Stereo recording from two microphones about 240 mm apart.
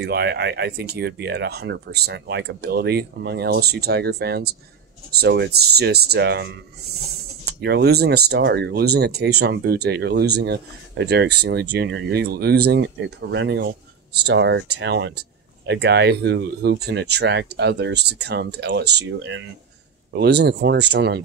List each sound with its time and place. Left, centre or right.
0.0 s speech: right
7.6 s speech: right